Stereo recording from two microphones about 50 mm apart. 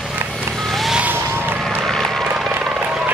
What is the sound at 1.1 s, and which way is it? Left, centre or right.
Vehicle, right.